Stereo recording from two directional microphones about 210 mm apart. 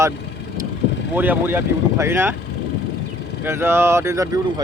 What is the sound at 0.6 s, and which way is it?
Vehicle, 15° right (ahead or behind).